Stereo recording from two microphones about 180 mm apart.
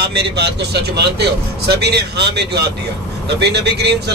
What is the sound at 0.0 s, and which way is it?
Speech, 65° right (ahead or behind).